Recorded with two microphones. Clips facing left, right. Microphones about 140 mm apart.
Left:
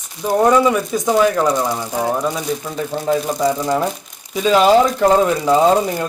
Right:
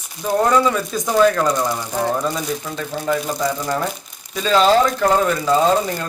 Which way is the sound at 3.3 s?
20° left (ahead or behind).